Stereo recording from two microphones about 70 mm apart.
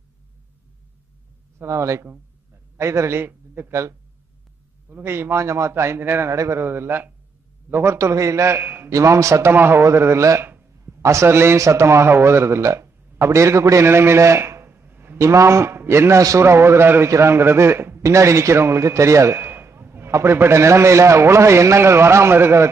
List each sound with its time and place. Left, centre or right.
1.6 s a man's voice: right
5.0 s a man's voice: right
6.3 s a man's voice: right
6.6 s a man's voice: right
8.9 s a man's voice: right
9.5 s a man's voice: right
15.1 s a man's voice: right